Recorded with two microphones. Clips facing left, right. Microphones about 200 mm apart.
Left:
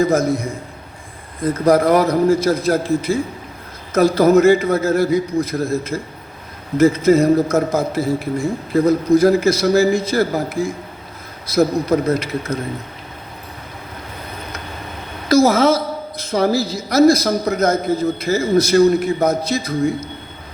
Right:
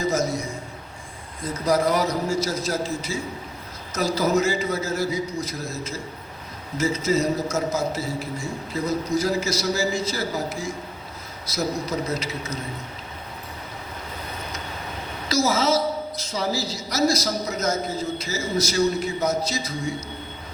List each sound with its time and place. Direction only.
0.0 s a woman's voice: 55° left (ahead or behind)
15.3 s a woman's voice: 55° left (ahead or behind)